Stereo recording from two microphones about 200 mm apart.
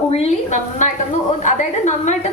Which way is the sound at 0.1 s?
30° left (ahead or behind).